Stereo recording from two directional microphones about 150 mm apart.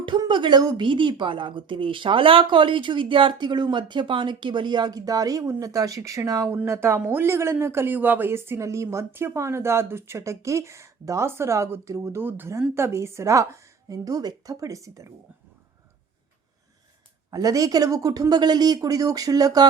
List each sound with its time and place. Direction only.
0.0 s a woman's voice: 30° right (ahead or behind)
17.3 s a woman's voice: 25° right (ahead or behind)